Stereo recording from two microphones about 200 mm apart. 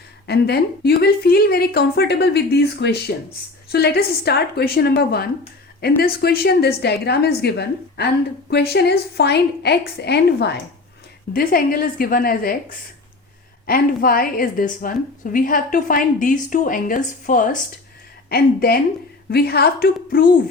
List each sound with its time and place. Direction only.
0.3 s a woman's voice: 55° left (ahead or behind)